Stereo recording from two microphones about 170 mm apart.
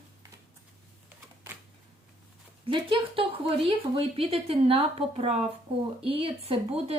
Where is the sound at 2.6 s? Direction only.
30° right (ahead or behind).